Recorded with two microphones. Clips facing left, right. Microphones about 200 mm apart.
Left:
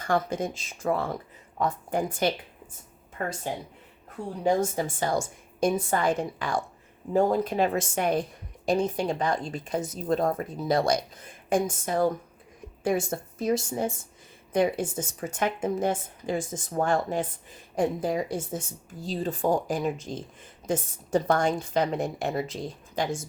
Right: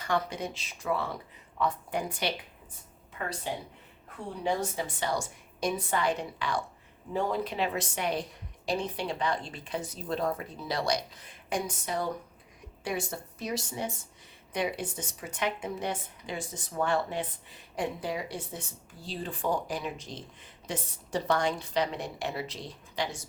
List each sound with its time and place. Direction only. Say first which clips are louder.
0.0 s speech: left 4 dB; 50° left (ahead or behind)
4.4 s speech: left 6 dB; 45° left (ahead or behind)